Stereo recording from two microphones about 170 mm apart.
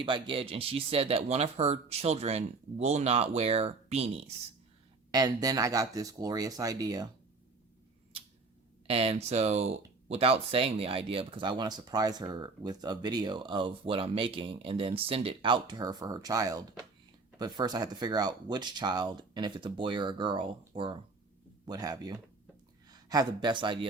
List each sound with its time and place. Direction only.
0.0 s speech: 30° right (ahead or behind)
5.1 s speech: 20° right (ahead or behind)
8.9 s speech: 35° right (ahead or behind)